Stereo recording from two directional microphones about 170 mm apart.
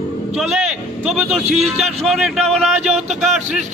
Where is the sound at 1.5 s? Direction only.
40° right (ahead or behind).